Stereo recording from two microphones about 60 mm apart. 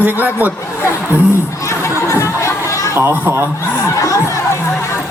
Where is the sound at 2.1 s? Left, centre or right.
Left.